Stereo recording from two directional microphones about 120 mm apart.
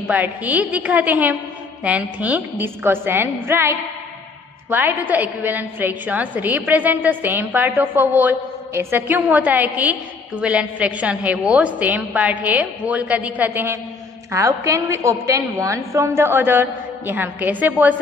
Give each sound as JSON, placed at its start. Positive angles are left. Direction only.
{"t": 0.1, "sound": "a woman's voice", "side_deg": -15}